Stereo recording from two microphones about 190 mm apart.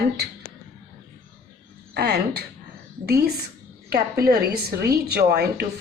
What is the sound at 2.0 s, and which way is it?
Speech, 60° right (ahead or behind).